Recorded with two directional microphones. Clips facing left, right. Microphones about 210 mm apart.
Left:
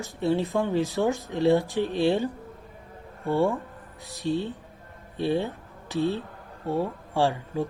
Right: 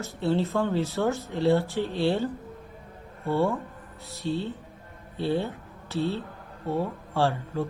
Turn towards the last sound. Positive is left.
turn(degrees=15)  # may be behind; listen again after turning